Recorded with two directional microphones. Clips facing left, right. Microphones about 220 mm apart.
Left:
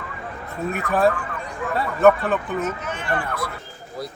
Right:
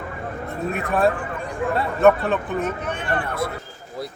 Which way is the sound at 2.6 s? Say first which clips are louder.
Right 1 dB; 35° right (ahead or behind).